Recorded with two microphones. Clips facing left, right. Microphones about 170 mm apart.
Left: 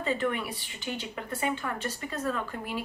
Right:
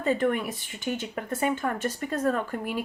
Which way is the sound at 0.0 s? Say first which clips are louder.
Right 5 dB; 45° right (ahead or behind).